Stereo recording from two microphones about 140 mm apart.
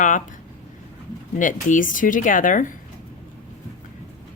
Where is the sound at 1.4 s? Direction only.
70° left (ahead or behind).